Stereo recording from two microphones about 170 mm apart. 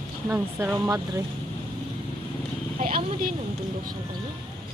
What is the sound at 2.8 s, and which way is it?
Speech, 60° right (ahead or behind).